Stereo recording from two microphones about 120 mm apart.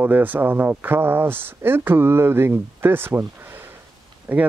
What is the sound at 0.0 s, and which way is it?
Speech, 15° right (ahead or behind).